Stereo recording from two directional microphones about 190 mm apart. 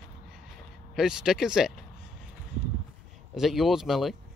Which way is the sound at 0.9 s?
5° right (ahead or behind).